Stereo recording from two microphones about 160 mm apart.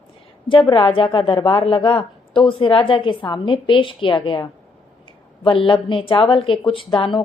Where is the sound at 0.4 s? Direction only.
30° left (ahead or behind).